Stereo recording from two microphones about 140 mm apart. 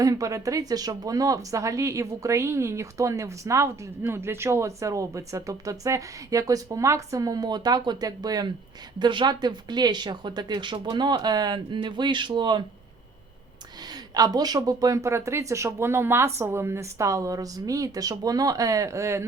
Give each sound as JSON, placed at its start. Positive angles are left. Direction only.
{"t": 0.0, "sound": "speech", "side_deg": -25}
{"t": 13.8, "sound": "speech", "side_deg": -30}